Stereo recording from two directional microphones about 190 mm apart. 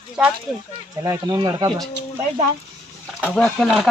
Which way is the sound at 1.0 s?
20° right (ahead or behind).